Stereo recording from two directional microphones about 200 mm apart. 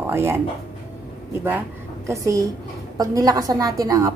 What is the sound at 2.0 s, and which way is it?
A woman's voice, 15° right (ahead or behind).